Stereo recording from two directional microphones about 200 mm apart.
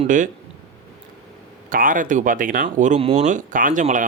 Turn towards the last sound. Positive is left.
turn(degrees=-40)  # may be behind; listen again after turning